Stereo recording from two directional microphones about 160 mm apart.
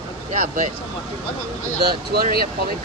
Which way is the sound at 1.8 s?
80° right.